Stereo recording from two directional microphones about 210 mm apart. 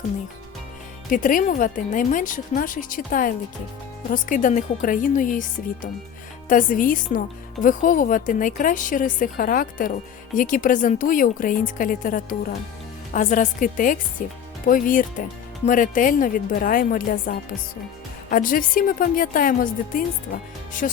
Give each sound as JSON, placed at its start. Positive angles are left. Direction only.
{"t": 1.1, "sound": "speech", "side_deg": 40}